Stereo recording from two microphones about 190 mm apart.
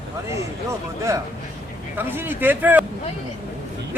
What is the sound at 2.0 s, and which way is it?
Speech, 10° right (ahead or behind).